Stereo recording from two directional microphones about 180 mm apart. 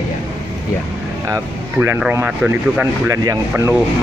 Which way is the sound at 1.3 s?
10° right (ahead or behind).